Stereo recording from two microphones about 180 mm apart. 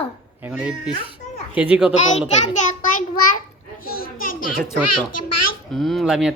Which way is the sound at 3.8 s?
55° left (ahead or behind).